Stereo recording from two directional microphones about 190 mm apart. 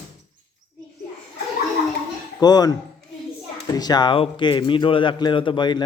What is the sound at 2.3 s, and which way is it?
A man's voice, 20° left (ahead or behind).